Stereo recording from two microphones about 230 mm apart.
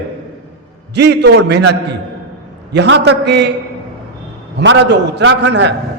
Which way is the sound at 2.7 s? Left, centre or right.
Right.